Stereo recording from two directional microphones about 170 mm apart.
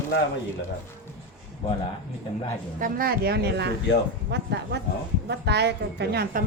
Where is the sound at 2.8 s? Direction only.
60° right (ahead or behind).